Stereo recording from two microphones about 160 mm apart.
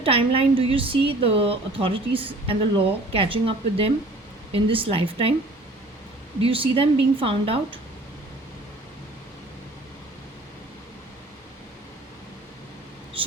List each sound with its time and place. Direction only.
0.0 s speech: 35° right (ahead or behind)
6.4 s speech: 35° right (ahead or behind)